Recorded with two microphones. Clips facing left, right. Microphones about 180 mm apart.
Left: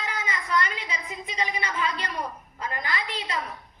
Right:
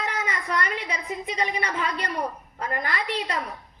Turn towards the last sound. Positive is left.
turn(degrees=-60)  # may be behind; listen again after turning